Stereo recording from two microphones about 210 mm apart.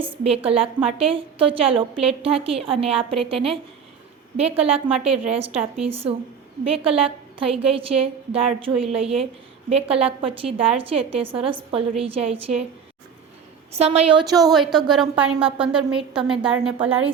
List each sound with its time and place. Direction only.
0.3 s a woman's voice: 25° right (ahead or behind)
13.7 s a woman's voice: 30° right (ahead or behind)
14.3 s a woman's voice: 15° right (ahead or behind)
14.5 s a woman's voice: centre (ahead or behind)